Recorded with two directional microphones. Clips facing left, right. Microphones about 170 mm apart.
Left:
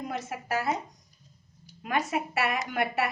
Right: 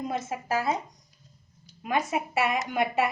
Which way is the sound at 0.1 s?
25° right (ahead or behind).